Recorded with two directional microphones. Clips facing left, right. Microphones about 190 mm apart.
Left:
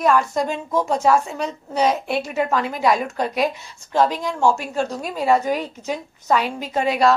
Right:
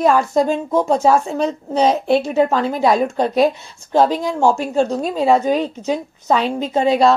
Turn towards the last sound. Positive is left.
turn(degrees=-25)  # may be behind; listen again after turning